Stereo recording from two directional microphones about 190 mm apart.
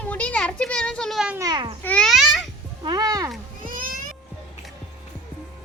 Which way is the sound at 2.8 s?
20° right (ahead or behind).